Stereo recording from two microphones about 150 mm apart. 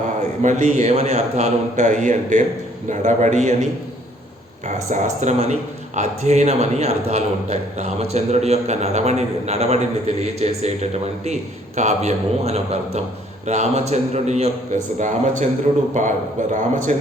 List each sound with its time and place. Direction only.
0.4 s a man's voice: 55° right (ahead or behind)
4.9 s a man's voice: 55° right (ahead or behind)